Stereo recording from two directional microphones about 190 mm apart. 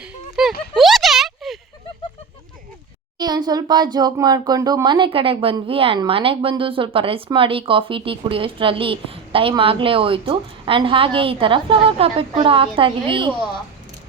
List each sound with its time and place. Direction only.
0.4 s speech: 5° right (ahead or behind)
0.7 s a sound: centre (ahead or behind)
3.2 s speech: 20° right (ahead or behind)